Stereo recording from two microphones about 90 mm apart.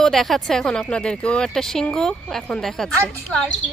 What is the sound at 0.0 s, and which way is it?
A woman's voice, 5° left (ahead or behind).